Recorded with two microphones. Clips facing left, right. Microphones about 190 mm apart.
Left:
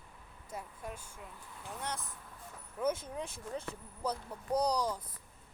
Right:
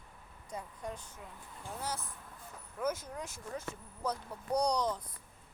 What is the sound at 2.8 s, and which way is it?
Speech, 30° left (ahead or behind).